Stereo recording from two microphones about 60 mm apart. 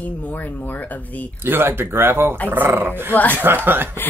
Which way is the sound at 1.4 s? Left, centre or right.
Right.